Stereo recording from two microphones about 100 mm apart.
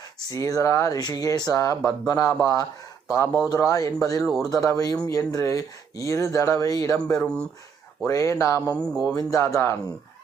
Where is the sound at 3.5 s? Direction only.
35° left (ahead or behind).